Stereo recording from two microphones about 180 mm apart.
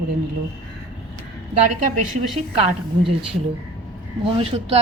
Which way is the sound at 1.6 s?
45° right (ahead or behind).